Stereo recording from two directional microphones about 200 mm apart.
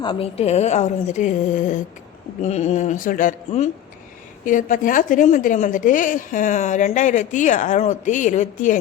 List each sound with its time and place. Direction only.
0.0 s a woman's voice: 25° left (ahead or behind)